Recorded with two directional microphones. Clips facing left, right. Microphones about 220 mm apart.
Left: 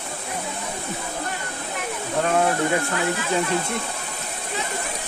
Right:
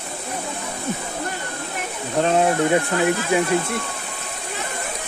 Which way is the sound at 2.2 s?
25° right (ahead or behind).